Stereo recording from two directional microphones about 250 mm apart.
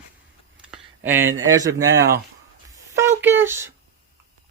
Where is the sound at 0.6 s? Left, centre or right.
Centre.